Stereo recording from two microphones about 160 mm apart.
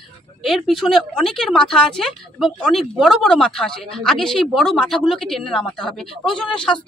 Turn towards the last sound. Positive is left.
turn(degrees=5)  # may be behind; listen again after turning